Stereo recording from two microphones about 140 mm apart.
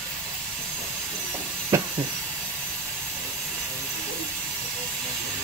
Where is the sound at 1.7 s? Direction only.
20° right (ahead or behind).